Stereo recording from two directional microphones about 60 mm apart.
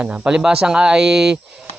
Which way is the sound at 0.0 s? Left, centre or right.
Right.